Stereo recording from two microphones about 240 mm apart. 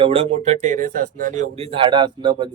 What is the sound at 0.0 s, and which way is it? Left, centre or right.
Speech, right.